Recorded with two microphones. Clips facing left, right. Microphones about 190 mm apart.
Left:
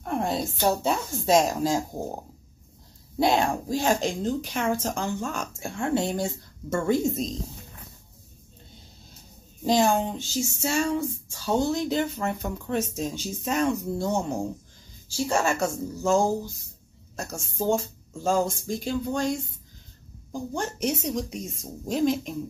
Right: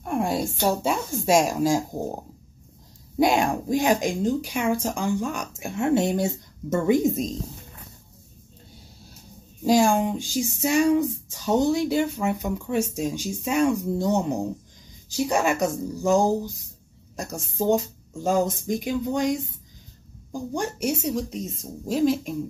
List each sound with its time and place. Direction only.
0.0 s a sound: 10° right (ahead or behind)
0.6 s a woman's voice: centre (ahead or behind)
1.2 s speech: 10° right (ahead or behind)
3.2 s speech: 15° right (ahead or behind)
9.7 s speech: 10° right (ahead or behind)
20.5 s a woman's voice: 10° right (ahead or behind)